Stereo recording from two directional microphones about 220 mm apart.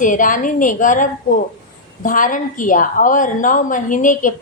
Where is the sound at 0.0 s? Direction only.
35° left (ahead or behind).